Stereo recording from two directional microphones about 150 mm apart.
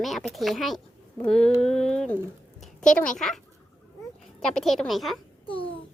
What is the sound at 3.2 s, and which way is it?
Speech, centre (ahead or behind).